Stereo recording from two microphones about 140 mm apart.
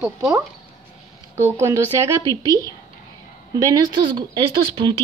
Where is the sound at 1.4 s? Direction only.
20° right (ahead or behind).